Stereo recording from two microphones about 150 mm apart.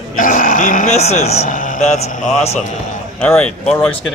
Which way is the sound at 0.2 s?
60° left (ahead or behind).